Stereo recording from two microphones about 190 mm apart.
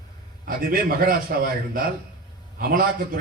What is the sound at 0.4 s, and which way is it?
Speech, 50° right (ahead or behind).